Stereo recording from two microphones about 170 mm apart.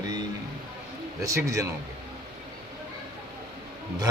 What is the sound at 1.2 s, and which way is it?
Speech, 20° right (ahead or behind).